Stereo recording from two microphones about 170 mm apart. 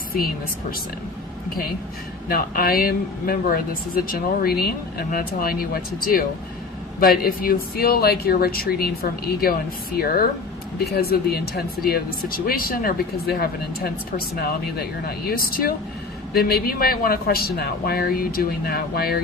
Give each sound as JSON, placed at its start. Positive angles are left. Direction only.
{"t": 2.3, "sound": "speech", "side_deg": 60}